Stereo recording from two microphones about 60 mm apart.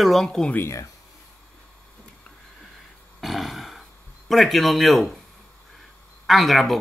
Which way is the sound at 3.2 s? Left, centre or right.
Centre.